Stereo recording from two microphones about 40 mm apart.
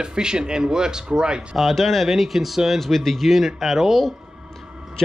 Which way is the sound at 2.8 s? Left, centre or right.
Centre.